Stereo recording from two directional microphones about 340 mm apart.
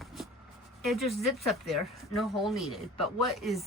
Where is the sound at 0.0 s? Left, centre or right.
Centre.